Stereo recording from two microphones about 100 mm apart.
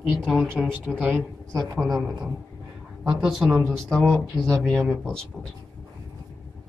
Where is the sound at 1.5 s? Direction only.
35° right (ahead or behind).